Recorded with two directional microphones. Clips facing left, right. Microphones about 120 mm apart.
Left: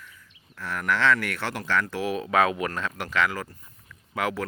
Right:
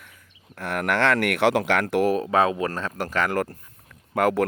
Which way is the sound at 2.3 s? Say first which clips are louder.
Right 2 dB; 30° right (ahead or behind).